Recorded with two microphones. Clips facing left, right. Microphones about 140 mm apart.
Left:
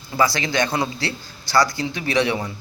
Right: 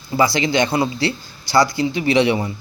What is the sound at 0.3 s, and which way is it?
Speech, 15° right (ahead or behind).